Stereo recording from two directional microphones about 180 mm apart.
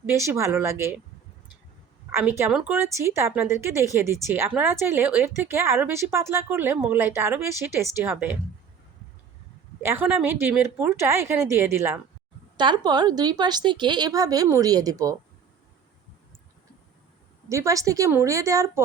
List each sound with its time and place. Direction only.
0.0 s speech: 15° right (ahead or behind)
2.1 s speech: 15° right (ahead or behind)
2.5 s speech: centre (ahead or behind)
2.7 s speech: 15° right (ahead or behind)
9.8 s speech: 15° right (ahead or behind)
12.5 s a woman's voice: 25° right (ahead or behind)
17.5 s speech: 15° right (ahead or behind)